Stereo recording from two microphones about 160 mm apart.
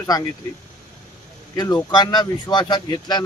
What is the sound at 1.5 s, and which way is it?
Speech, 25° left (ahead or behind).